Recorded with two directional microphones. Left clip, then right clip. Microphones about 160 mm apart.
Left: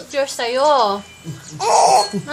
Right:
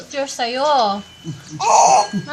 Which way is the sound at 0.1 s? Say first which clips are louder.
Left 2 dB; 15° left (ahead or behind).